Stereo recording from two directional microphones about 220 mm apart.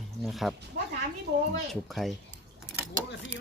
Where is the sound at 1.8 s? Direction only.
Centre (ahead or behind).